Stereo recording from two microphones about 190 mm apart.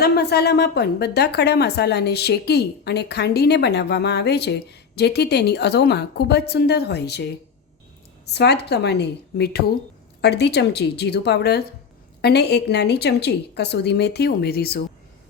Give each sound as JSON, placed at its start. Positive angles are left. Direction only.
{"t": 0.0, "sound": "a woman's voice", "side_deg": 55}
{"t": 8.3, "sound": "a woman's voice", "side_deg": 60}